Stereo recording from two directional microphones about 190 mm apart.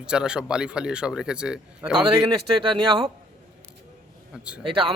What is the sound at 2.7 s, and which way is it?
Speech, 25° right (ahead or behind).